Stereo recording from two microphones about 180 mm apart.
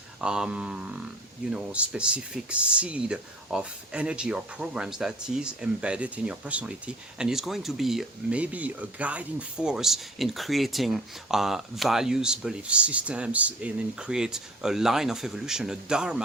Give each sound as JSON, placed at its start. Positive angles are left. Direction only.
{"t": 0.2, "sound": "speech", "side_deg": -5}